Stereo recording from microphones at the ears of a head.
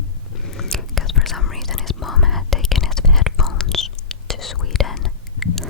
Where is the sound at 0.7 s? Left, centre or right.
Left.